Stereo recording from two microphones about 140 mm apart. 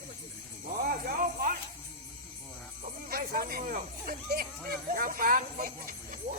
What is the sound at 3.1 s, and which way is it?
Speech, 90° right.